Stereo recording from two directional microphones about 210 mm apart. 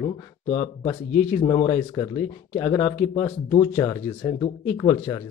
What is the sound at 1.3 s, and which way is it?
Speech, 20° left (ahead or behind).